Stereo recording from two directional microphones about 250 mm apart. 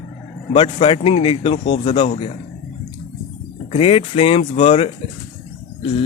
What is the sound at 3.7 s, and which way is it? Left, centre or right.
Speech, left.